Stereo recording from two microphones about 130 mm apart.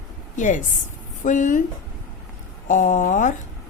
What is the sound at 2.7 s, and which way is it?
Speech, 85° left.